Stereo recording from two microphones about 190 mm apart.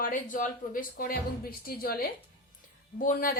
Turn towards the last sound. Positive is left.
turn(degrees=45)  # may be behind; listen again after turning